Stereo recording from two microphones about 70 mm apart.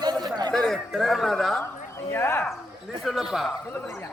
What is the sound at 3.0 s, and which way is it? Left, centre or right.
Speech, centre.